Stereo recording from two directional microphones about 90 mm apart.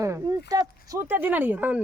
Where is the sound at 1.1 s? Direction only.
20° right (ahead or behind).